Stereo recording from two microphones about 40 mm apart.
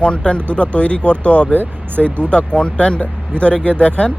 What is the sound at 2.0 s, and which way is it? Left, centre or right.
Speech, centre.